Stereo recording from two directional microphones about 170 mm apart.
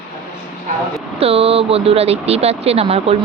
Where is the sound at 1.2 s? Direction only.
35° right (ahead or behind).